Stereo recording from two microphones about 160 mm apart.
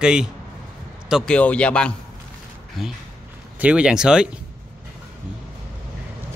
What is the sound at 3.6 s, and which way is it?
Speech, 5° right (ahead or behind).